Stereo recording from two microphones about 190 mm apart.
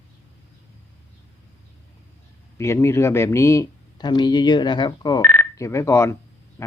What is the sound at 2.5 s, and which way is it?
Speech, 15° left (ahead or behind).